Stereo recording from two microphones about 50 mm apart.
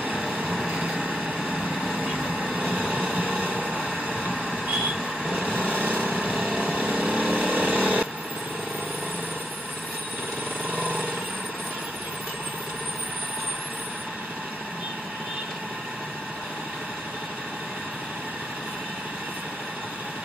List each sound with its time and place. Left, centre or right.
0.5 s vehicle: centre
1.0 s vehicle: centre
1.8 s vehicle: centre
2.1 s vehicle: centre
2.9 s white noise: right
3.8 s a sound: centre
5.6 s lawn mower: right
7.0 s vehicle: right
10.7 s a sound: right